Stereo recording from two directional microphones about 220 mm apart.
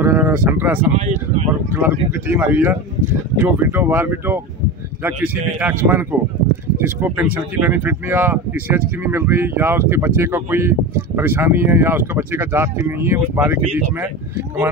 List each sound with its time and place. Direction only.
0.0 s speech: 10° right (ahead or behind)
0.9 s speech: 30° right (ahead or behind)
1.8 s speech: 10° right (ahead or behind)